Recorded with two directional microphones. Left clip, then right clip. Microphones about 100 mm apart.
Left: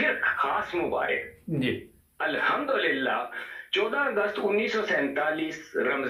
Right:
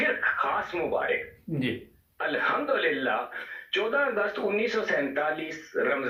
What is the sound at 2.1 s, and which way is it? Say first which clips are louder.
Speech: left 1 dB; 30° right (ahead or behind).